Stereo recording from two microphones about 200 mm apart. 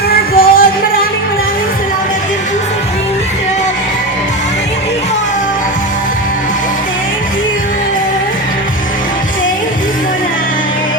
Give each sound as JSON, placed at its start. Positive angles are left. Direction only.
{"t": 0.1, "sound": "music", "side_deg": 45}